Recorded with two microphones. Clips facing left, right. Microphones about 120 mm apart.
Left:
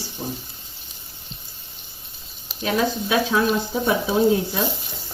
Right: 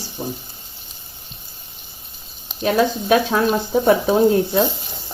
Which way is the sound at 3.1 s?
50° right (ahead or behind).